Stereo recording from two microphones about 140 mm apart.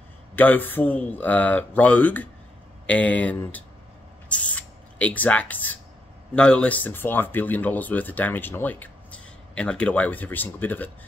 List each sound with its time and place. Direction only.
0.4 s speech: 15° left (ahead or behind)
4.3 s spray: 10° left (ahead or behind)
6.3 s speech: 10° left (ahead or behind)